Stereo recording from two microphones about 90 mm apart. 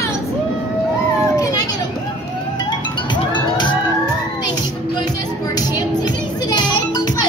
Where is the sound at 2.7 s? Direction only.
60° left (ahead or behind).